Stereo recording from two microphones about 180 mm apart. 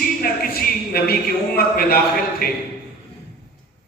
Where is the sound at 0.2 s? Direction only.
55° left (ahead or behind).